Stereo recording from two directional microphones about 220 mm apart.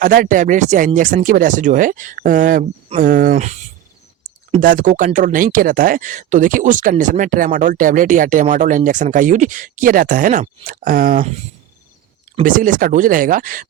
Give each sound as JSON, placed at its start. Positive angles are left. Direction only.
{"t": 0.0, "sound": "speech", "side_deg": -40}
{"t": 12.4, "sound": "speech", "side_deg": -35}